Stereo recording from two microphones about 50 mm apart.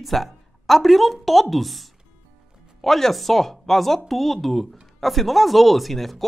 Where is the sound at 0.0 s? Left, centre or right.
Centre.